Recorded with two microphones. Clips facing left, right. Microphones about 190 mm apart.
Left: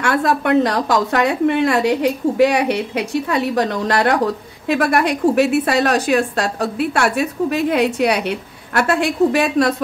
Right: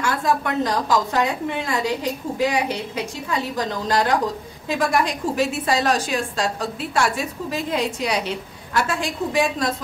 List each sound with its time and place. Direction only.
0.0 s a woman's voice: 65° left (ahead or behind)